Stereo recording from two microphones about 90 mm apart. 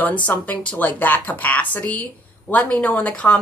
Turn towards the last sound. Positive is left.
turn(degrees=15)  # may be behind; listen again after turning